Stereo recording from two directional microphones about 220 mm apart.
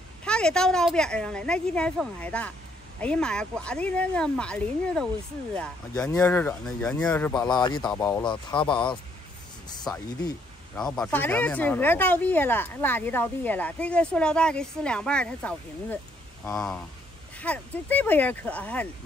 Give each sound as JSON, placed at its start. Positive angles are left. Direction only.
{"t": 0.2, "sound": "a woman's voice", "side_deg": 5}
{"t": 7.4, "sound": "speech", "side_deg": 20}
{"t": 7.9, "sound": "speech", "side_deg": 10}
{"t": 10.8, "sound": "a woman's voice", "side_deg": 5}